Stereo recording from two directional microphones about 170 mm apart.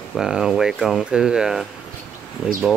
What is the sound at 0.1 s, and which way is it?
Speech, 5° right (ahead or behind).